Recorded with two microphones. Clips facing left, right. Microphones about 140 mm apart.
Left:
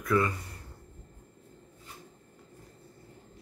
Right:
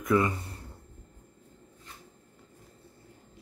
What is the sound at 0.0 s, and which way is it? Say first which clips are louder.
Speech: right 2 dB; 20° right (ahead or behind).